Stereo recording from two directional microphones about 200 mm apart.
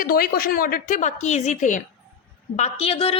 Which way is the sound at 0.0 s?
45° left (ahead or behind).